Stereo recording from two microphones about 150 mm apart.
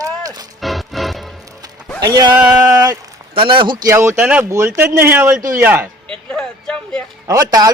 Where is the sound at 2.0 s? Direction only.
25° right (ahead or behind).